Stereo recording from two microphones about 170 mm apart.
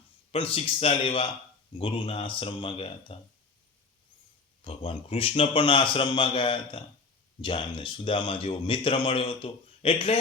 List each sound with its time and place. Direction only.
0.3 s speech: 35° left (ahead or behind)
4.6 s speech: 30° left (ahead or behind)